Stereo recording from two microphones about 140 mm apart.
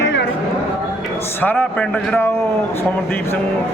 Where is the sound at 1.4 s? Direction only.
15° left (ahead or behind).